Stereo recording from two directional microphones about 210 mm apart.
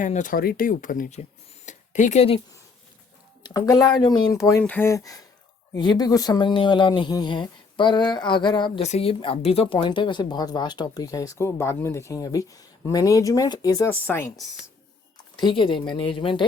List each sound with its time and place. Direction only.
0.0 s speech: 40° left (ahead or behind)
1.6 s a sound: 35° left (ahead or behind)
3.4 s speech: 20° left (ahead or behind)
15.4 s speech: 20° left (ahead or behind)